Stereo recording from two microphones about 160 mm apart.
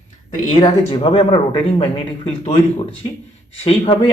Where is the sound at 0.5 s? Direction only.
30° left (ahead or behind).